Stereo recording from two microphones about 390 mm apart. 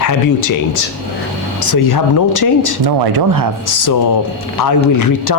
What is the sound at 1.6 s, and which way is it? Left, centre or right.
Speech, left.